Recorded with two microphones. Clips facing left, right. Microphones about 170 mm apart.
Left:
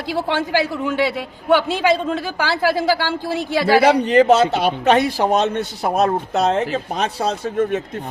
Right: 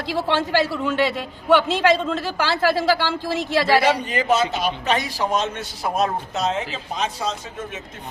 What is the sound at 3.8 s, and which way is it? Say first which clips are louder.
Speech: left 8 dB; 65° left (ahead or behind).